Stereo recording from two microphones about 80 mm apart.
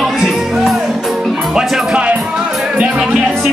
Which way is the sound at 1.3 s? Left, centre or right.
Centre.